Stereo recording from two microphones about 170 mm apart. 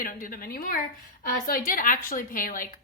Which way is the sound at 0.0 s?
55° left (ahead or behind).